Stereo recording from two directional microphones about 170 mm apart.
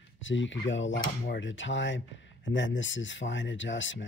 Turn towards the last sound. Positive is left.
turn(degrees=90)